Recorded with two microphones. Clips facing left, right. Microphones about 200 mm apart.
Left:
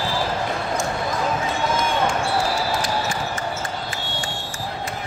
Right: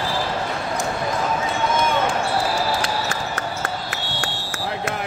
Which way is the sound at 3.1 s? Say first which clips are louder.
Even; 65° right (ahead or behind).